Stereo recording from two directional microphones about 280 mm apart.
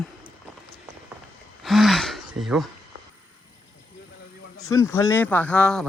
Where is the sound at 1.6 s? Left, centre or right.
Centre.